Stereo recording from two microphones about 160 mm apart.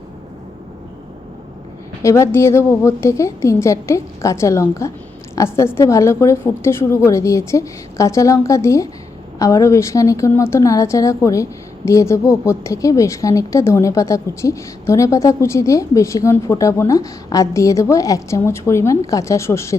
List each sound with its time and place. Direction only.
2.0 s speech: 20° left (ahead or behind)